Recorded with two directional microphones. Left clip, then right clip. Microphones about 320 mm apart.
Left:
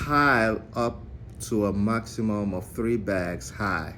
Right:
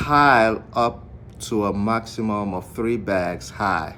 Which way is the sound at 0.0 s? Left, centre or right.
Centre.